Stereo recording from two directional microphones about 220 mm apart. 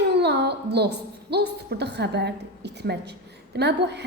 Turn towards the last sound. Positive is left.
turn(degrees=-50)  # may be behind; listen again after turning